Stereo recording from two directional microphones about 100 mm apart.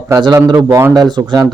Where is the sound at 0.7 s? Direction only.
30° right (ahead or behind).